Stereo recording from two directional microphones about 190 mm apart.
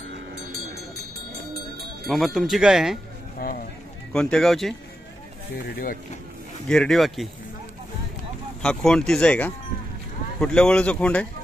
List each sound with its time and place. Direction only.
2.0 s speech: centre (ahead or behind)
3.3 s run: 50° left (ahead or behind)
4.1 s speech: 5° left (ahead or behind)
6.7 s speech: 5° left (ahead or behind)
8.6 s speech: 5° left (ahead or behind)